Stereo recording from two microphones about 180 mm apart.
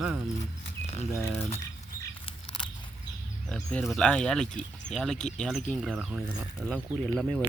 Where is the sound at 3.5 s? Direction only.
5° left (ahead or behind).